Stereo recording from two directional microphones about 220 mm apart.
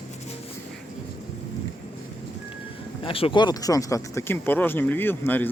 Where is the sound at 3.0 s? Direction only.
25° left (ahead or behind).